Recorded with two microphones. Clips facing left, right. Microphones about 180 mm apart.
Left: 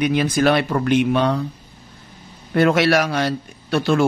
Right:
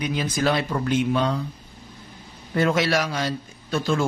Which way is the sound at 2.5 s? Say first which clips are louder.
Left 5 dB; 65° left (ahead or behind).